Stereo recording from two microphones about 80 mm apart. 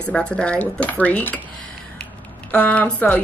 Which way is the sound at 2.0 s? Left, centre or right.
Centre.